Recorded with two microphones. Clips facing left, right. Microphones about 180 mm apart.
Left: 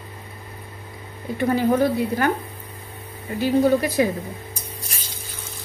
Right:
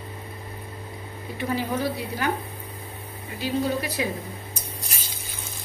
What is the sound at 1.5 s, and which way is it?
Speech, 50° left (ahead or behind).